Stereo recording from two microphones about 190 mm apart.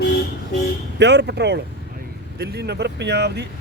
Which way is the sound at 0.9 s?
65° right (ahead or behind).